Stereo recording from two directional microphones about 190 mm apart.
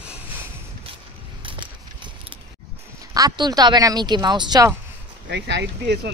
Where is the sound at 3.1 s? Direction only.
20° right (ahead or behind).